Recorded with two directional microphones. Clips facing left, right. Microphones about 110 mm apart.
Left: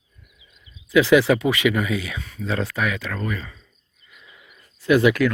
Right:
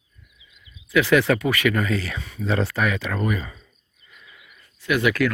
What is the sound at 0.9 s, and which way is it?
Speech, 15° left (ahead or behind).